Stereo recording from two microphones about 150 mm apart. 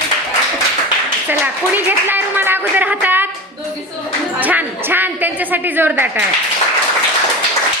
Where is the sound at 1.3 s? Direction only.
15° right (ahead or behind).